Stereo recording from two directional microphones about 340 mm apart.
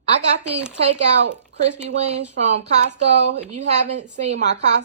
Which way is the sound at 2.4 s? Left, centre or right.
Centre.